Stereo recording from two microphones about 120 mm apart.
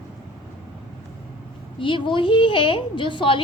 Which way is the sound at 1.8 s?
45° left (ahead or behind).